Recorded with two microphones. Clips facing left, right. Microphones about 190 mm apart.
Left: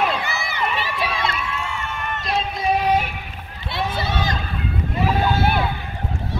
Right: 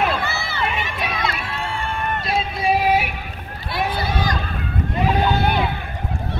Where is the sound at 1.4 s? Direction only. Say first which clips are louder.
Right 1 dB; 30° right (ahead or behind).